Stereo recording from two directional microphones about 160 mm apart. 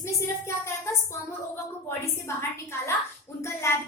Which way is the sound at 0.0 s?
15° left (ahead or behind).